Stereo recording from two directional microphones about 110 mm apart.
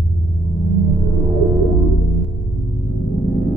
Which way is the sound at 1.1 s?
15° right (ahead or behind).